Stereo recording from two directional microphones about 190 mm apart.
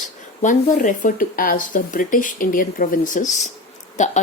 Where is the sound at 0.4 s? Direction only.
45° left (ahead or behind).